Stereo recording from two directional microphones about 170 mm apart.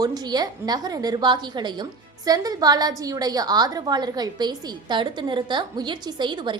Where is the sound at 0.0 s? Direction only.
25° right (ahead or behind).